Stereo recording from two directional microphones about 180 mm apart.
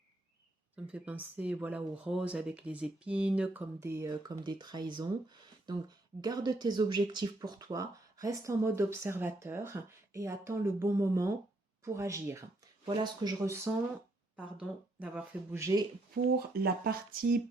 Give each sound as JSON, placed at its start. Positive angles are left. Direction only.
{"t": 0.9, "sound": "speech", "side_deg": -10}
{"t": 14.3, "sound": "speech", "side_deg": -5}
{"t": 16.1, "sound": "speech", "side_deg": -55}